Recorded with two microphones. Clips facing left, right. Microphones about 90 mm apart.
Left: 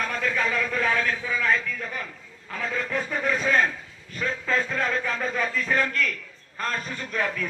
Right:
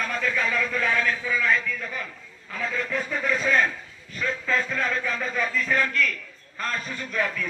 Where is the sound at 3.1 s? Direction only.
25° left (ahead or behind).